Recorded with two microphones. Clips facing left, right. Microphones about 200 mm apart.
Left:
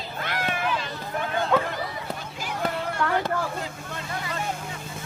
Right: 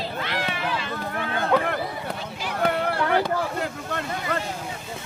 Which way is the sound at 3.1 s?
65° right (ahead or behind).